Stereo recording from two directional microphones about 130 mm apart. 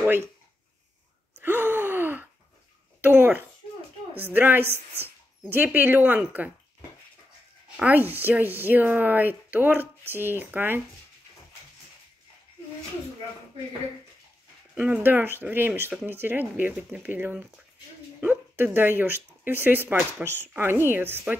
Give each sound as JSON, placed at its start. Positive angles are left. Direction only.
{"t": 0.0, "sound": "speech", "side_deg": -15}
{"t": 1.4, "sound": "gasp", "side_deg": -15}
{"t": 3.0, "sound": "speech", "side_deg": -15}
{"t": 7.7, "sound": "speech", "side_deg": -15}
{"t": 14.8, "sound": "speech", "side_deg": -15}